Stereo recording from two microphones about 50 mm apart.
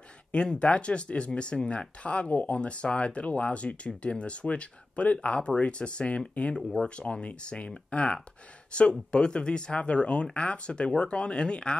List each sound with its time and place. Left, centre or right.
0.3 s speech: centre